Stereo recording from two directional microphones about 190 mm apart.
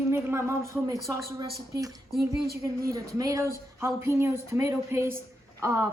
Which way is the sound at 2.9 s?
15° right (ahead or behind).